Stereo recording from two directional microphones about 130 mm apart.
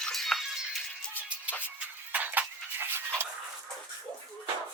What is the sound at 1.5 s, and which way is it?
Music, 15° left (ahead or behind).